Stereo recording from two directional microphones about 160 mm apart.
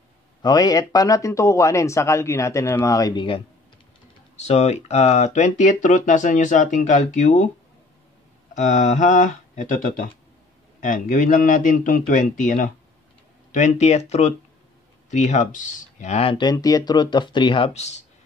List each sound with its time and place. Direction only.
0.4 s a man's voice: 25° left (ahead or behind)
4.4 s speech: 45° left (ahead or behind)
8.5 s a man's voice: 45° left (ahead or behind); by 17.6 s 30° left (ahead or behind)